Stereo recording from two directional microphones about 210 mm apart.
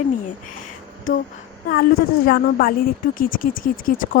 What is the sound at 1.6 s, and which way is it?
A woman's voice, 45° left (ahead or behind).